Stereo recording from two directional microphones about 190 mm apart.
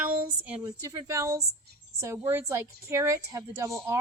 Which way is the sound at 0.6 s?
15° right (ahead or behind).